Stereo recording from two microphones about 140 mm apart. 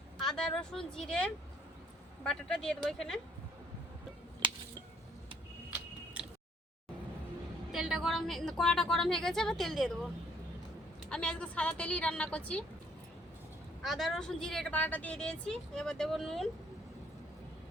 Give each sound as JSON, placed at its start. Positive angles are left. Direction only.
{"t": 0.3, "sound": "speech", "side_deg": 5}
{"t": 4.4, "sound": "a sound", "side_deg": -40}
{"t": 7.7, "sound": "speech", "side_deg": -5}
{"t": 11.1, "sound": "a woman's voice", "side_deg": 5}
{"t": 13.8, "sound": "speech", "side_deg": 0}